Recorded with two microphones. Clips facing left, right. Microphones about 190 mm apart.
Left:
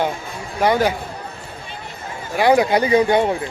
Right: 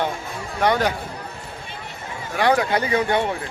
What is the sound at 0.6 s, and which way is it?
Speech, 5° left (ahead or behind).